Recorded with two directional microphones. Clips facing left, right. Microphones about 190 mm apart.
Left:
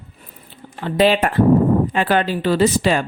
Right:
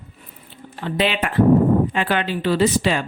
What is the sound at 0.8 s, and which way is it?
A woman's voice, 40° left (ahead or behind).